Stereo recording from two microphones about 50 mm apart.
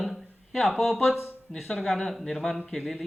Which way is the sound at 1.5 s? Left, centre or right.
Centre.